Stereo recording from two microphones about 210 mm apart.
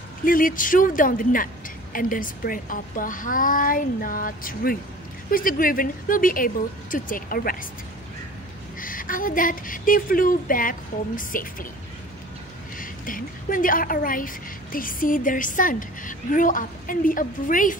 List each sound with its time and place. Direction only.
0.2 s a woman's voice: 40° left (ahead or behind)
8.7 s a woman's voice: 40° left (ahead or behind)
12.7 s a woman's voice: 40° left (ahead or behind)